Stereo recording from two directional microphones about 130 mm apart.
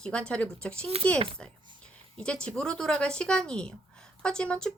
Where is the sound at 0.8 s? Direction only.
50° right (ahead or behind).